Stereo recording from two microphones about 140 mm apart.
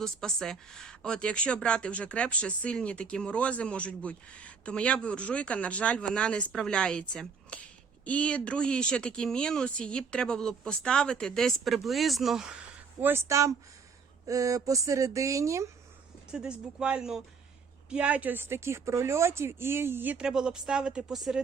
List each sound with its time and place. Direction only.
0.0 s speech: 5° left (ahead or behind); by 15.7 s 20° right (ahead or behind)
16.3 s speech: 5° right (ahead or behind)